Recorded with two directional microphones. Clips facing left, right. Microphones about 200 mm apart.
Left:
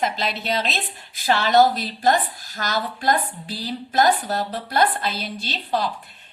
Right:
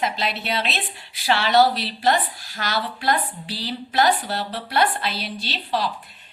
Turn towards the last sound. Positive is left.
turn(degrees=50)  # may be behind; listen again after turning